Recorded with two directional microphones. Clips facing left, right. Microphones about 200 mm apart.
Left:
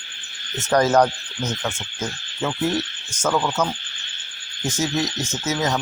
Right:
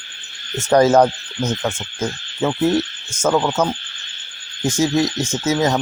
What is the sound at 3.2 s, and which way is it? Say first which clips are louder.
Speech: right 4 dB; 25° right (ahead or behind).